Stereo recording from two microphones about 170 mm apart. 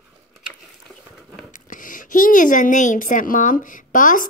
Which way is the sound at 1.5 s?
50° left (ahead or behind).